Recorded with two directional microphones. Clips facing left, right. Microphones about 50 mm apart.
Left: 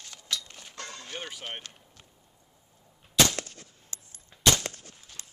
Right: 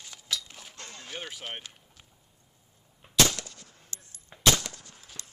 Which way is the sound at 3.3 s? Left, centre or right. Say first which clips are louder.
Left 3 dB; left.